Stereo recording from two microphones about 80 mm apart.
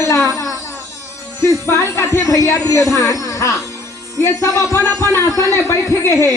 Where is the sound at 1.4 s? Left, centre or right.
Left.